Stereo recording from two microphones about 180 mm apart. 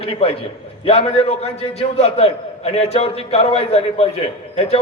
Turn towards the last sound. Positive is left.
turn(degrees=35)  # may be behind; listen again after turning